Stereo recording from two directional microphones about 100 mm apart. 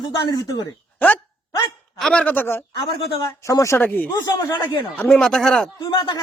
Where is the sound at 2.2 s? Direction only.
20° left (ahead or behind).